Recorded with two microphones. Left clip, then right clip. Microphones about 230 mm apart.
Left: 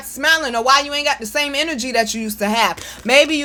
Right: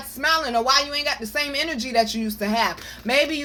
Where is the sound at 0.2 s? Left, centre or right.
Left.